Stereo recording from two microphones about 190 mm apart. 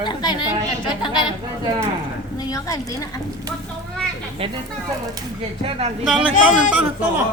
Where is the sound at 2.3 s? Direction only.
20° left (ahead or behind).